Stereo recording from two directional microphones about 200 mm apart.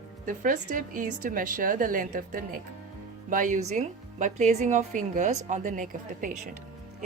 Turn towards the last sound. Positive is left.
turn(degrees=-40)  # may be behind; listen again after turning